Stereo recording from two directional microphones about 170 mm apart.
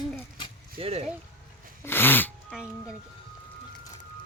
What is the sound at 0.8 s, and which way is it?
Speech, 35° right (ahead or behind).